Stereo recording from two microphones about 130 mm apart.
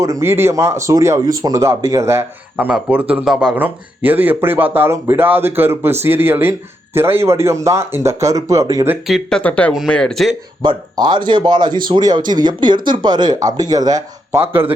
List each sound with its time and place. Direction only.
0.0 s speech: 20° right (ahead or behind)
9.0 s speech: centre (ahead or behind)
9.4 s speech: 10° left (ahead or behind)
10.6 s speech: 35° right (ahead or behind)